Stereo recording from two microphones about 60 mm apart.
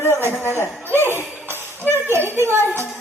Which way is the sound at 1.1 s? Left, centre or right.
Right.